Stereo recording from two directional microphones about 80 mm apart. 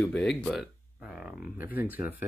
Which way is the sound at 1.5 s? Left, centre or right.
Right.